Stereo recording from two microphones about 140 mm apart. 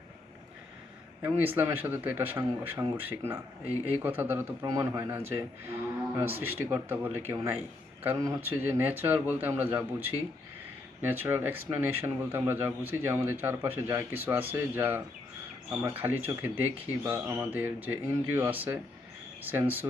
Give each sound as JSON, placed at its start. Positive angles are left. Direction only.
{"t": 1.2, "sound": "speech", "side_deg": -15}
{"t": 11.1, "sound": "speech", "side_deg": -15}